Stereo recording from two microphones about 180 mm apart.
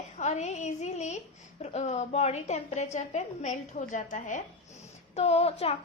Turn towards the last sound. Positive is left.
turn(degrees=35)  # may be behind; listen again after turning